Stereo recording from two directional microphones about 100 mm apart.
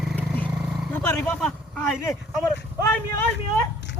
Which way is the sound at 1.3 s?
10° left (ahead or behind).